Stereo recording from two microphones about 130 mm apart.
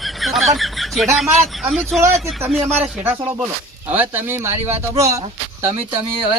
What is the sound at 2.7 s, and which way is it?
Speech, 15° right (ahead or behind).